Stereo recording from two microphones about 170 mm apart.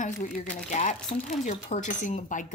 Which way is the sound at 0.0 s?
45° left (ahead or behind).